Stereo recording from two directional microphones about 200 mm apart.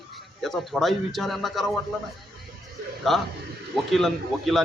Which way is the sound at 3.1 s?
Centre (ahead or behind).